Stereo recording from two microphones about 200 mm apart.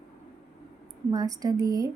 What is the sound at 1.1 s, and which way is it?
Speech, 20° right (ahead or behind).